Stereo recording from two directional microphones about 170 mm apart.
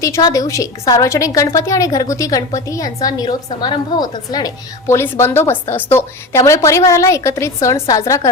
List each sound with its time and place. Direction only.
0.0 s a woman's voice: 20° left (ahead or behind)